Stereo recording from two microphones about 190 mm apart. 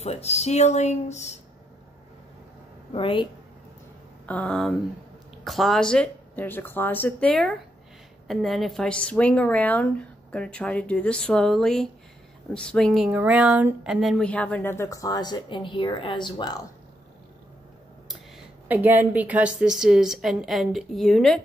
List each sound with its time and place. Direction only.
0.0 s speech: 35° left (ahead or behind)
2.9 s speech: 25° left (ahead or behind)
4.3 s a woman's voice: 5° left (ahead or behind); by 16.5 s 25° left (ahead or behind)
18.7 s a woman's voice: 10° right (ahead or behind)